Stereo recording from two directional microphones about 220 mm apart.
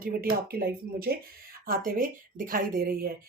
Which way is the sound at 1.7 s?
40° right (ahead or behind).